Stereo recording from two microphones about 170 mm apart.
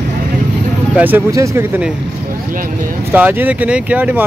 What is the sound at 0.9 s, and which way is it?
Speech, 10° right (ahead or behind).